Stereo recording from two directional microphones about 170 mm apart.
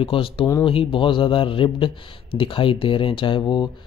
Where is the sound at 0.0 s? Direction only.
30° left (ahead or behind).